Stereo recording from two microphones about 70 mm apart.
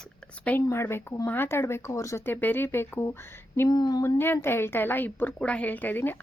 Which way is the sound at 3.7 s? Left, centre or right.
Left.